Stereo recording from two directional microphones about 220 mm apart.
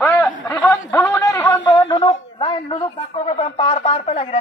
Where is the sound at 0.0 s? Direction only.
10° left (ahead or behind).